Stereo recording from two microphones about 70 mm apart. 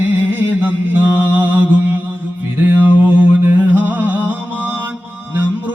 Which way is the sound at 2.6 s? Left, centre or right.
Right.